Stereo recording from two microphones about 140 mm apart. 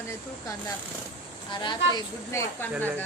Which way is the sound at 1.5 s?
35° left (ahead or behind).